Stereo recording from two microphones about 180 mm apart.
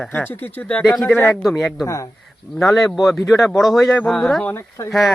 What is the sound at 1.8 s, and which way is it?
Speech, 15° left (ahead or behind).